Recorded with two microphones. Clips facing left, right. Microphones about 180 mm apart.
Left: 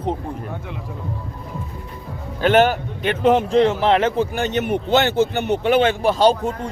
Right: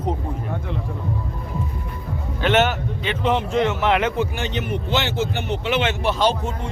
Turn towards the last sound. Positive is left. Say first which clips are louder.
# left 5 dB
turn(degrees=45)  # may be behind; listen again after turning